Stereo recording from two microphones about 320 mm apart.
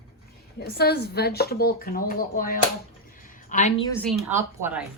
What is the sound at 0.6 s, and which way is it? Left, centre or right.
A woman's voice, left.